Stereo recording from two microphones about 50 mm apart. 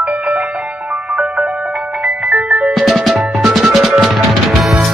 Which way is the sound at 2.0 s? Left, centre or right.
Right.